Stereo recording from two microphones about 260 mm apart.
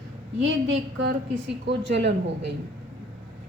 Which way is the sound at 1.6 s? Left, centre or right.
Right.